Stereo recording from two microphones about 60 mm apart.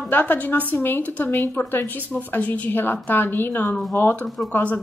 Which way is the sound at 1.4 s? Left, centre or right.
Left.